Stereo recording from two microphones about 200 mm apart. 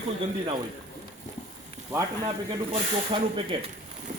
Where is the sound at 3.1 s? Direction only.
25° right (ahead or behind).